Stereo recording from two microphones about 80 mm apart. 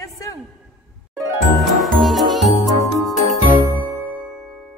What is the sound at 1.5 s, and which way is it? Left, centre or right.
Jingle, centre.